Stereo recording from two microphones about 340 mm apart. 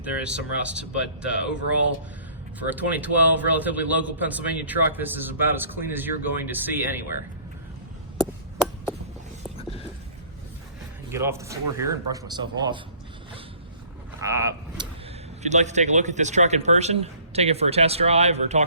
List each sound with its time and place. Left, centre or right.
0.0 s a man's voice: centre
2.6 s a man's voice: centre
9.6 s a sound: centre
11.1 s speech: centre
14.2 s speech: centre
15.4 s a man's voice: centre